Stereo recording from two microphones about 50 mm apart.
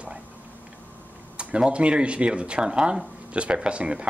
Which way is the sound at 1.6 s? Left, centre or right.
Right.